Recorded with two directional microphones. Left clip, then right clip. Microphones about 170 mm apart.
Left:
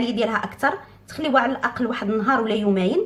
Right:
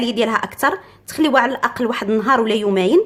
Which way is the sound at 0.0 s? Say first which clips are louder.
Right 4 dB; 45° right (ahead or behind).